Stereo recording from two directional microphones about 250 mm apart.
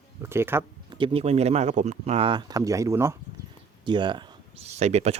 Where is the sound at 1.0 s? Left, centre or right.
Right.